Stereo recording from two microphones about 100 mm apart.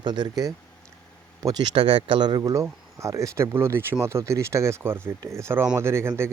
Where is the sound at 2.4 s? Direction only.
30° right (ahead or behind).